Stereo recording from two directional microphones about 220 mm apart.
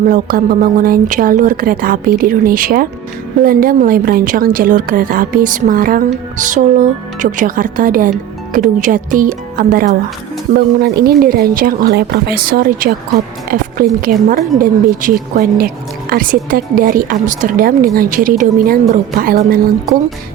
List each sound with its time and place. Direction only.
0.0 s speech: 40° right (ahead or behind)